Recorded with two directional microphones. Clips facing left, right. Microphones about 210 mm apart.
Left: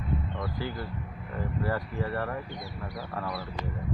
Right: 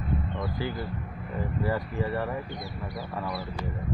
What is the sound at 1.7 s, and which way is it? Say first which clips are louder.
Speech: right 3 dB; 10° right (ahead or behind).